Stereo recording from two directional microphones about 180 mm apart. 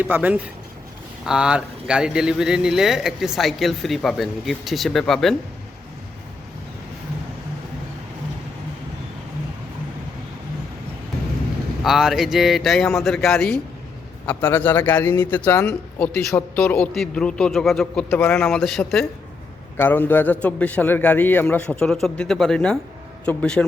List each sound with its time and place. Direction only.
0.0 s speech: 10° right (ahead or behind)
11.8 s a man's voice: centre (ahead or behind)